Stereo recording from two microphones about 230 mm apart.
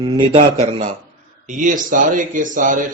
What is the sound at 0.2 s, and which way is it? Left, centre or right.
Speech, right.